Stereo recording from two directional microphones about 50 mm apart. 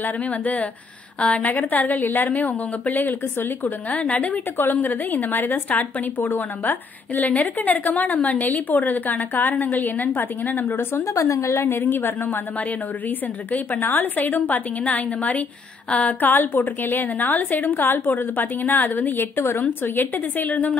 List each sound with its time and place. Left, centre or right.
0.0 s a woman's voice: left
4.6 s a woman's voice: left
11.1 s a woman's voice: left
11.6 s a woman's voice: left
13.5 s a woman's voice: left